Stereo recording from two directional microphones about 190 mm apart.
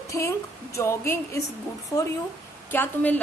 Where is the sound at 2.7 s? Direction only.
10° left (ahead or behind).